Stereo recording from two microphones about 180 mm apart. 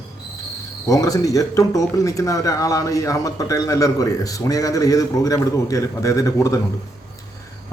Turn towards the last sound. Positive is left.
turn(degrees=15)  # may be behind; listen again after turning